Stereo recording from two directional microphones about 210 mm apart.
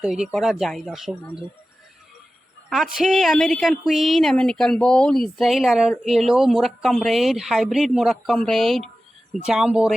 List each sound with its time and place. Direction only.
0.0 s speech: 5° right (ahead or behind)
2.6 s speech: centre (ahead or behind)